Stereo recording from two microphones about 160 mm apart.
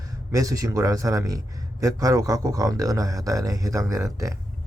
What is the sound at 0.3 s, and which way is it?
A man's voice, 20° right (ahead or behind).